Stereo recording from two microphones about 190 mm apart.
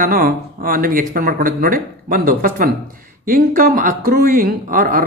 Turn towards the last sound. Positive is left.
turn(degrees=-45)  # may be behind; listen again after turning